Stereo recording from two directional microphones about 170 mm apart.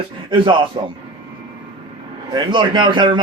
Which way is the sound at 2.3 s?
30° right (ahead or behind).